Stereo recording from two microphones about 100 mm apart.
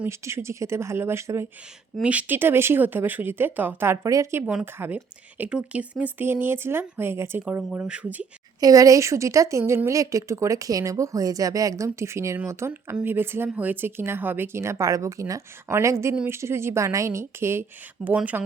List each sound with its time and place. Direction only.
0.1 s speech: 25° right (ahead or behind)
2.0 s speech: 15° right (ahead or behind)
4.0 s a woman's voice: 30° right (ahead or behind)
4.4 s speech: 15° right (ahead or behind)
8.6 s a woman's voice: 35° right (ahead or behind); by 18.4 s 15° right (ahead or behind)